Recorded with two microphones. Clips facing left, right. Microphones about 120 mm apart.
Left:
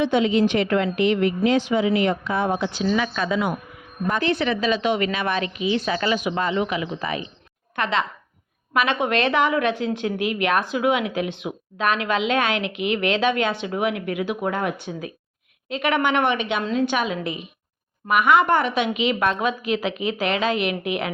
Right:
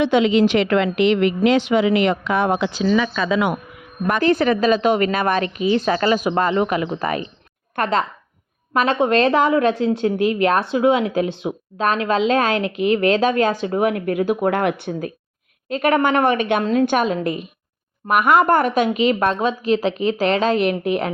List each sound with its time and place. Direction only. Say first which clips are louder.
0.0 s a woman's voice: right 4 dB; 90° right
4.2 s a woman's voice: right 7 dB; 45° right (ahead or behind)
14.5 s speech: right 6 dB; 65° right (ahead or behind)
15.7 s a woman's voice: right 4 dB; 45° right (ahead or behind)